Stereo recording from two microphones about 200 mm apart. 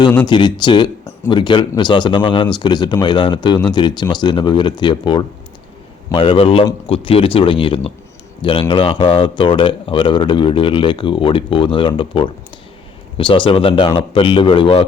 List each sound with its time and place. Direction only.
0.3 s speech: 20° left (ahead or behind)